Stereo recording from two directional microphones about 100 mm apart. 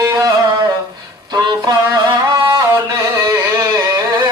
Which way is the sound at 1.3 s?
40° right (ahead or behind).